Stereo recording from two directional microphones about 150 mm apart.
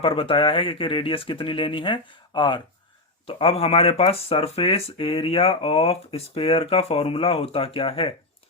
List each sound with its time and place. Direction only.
0.0 s speech: 35° left (ahead or behind)